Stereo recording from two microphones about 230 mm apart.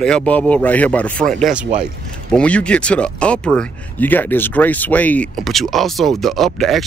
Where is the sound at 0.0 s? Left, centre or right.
Centre.